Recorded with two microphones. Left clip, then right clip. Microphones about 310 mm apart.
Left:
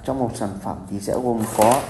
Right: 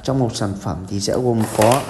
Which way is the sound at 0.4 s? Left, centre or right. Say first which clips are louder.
Right 3 dB; left.